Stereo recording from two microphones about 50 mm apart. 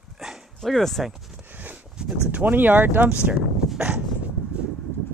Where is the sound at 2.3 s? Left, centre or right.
Right.